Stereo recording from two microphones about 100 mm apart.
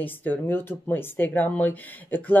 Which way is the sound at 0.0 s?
20° left (ahead or behind).